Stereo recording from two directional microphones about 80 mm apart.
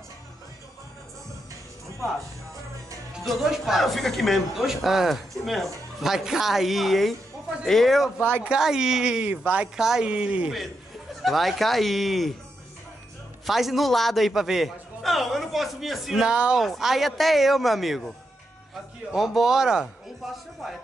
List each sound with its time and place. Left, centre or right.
3.3 s speech: centre
11.2 s speech: centre
13.5 s speech: centre
19.1 s speech: centre